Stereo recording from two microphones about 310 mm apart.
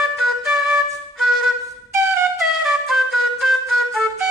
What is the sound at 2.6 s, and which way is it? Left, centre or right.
Music, centre.